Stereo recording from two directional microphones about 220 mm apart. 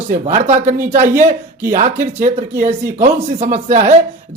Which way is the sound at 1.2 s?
10° right (ahead or behind).